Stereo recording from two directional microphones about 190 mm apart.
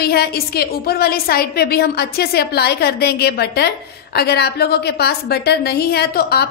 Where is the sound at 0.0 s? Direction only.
55° left (ahead or behind).